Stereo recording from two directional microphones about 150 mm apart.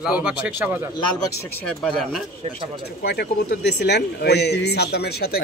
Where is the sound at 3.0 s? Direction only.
90° left.